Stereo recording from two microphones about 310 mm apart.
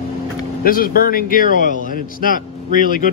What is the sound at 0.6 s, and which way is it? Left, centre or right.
A man's voice, left.